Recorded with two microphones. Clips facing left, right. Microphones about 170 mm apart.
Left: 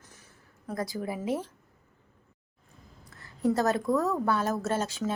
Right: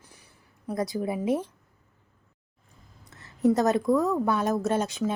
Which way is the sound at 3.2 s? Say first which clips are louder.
Right 4 dB; 20° right (ahead or behind).